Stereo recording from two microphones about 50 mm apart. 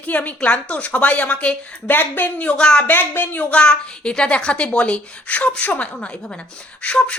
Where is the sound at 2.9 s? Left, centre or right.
Left.